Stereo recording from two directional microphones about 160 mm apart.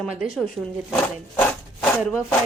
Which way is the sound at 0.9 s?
5° left (ahead or behind).